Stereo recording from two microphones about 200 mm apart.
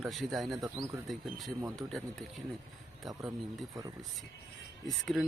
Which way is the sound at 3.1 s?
15° right (ahead or behind).